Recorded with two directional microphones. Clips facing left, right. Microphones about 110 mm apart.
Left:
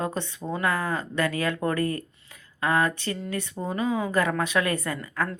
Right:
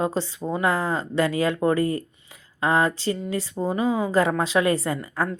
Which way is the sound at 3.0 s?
20° right (ahead or behind).